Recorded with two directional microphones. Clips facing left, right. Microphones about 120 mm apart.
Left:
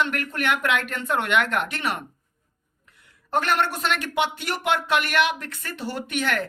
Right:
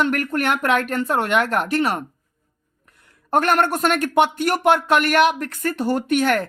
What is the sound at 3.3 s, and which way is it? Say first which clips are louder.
Speech: right 5 dB; 50° right (ahead or behind).